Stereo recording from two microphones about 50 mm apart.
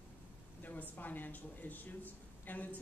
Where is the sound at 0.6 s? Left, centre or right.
Left.